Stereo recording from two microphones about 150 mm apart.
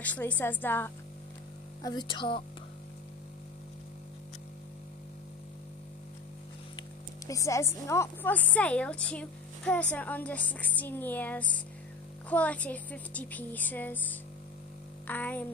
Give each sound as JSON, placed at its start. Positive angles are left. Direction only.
{"t": 0.0, "sound": "a woman's voice", "side_deg": 10}
{"t": 1.8, "sound": "speech", "side_deg": 30}
{"t": 7.2, "sound": "a woman's voice", "side_deg": 20}